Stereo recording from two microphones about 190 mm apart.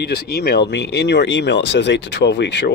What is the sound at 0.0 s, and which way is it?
Speech, 55° left (ahead or behind).